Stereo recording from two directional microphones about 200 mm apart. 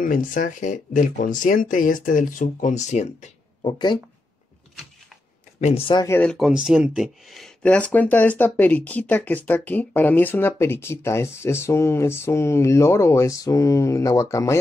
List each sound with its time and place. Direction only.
0.0 s speech: 40° left (ahead or behind)
3.7 s speech: 20° left (ahead or behind)
5.6 s speech: 30° left (ahead or behind)
6.0 s speech: 10° left (ahead or behind)
6.3 s speech: centre (ahead or behind); by 14.6 s 15° left (ahead or behind)